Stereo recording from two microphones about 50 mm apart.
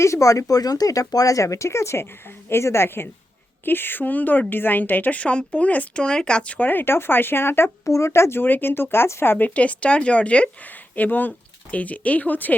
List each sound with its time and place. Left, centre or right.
0.0 s a woman's voice: left
3.7 s a woman's voice: left
6.0 s speech: centre
6.7 s a woman's voice: left
7.9 s speech: left
8.4 s speech: left
9.2 s speech: left
9.6 s speech: left
10.7 s speech: left